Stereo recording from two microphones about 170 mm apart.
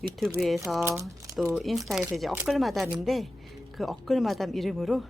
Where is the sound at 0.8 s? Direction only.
15° right (ahead or behind).